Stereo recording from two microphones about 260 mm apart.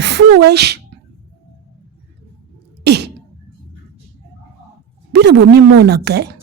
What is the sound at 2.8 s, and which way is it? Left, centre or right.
Sneeze, right.